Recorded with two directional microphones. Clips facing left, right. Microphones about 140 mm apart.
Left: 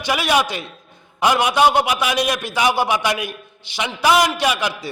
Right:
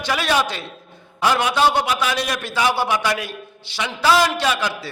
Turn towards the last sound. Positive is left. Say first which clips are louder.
# left 1 dB
turn(degrees=15)  # may be behind; listen again after turning